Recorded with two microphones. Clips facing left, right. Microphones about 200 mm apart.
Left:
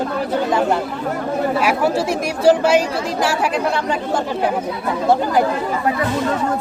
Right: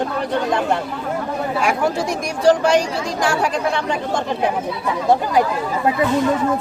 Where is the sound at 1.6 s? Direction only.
5° left (ahead or behind).